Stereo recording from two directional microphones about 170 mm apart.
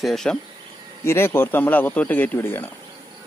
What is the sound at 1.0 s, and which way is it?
Speech, 15° left (ahead or behind).